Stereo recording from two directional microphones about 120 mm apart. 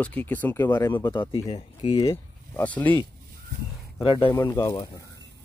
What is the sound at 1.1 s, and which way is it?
Speech, 30° left (ahead or behind).